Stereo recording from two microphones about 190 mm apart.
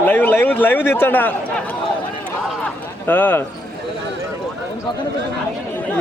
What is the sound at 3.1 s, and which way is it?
Speech, 10° left (ahead or behind).